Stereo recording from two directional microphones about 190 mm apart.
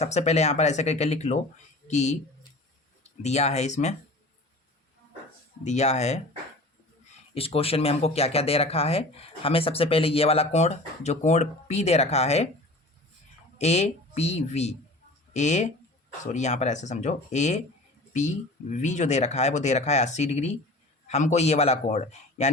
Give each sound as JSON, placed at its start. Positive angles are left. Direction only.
{"t": 0.0, "sound": "speech", "side_deg": 35}
{"t": 5.6, "sound": "speech", "side_deg": 35}
{"t": 7.3, "sound": "speech", "side_deg": 30}
{"t": 13.6, "sound": "speech", "side_deg": 35}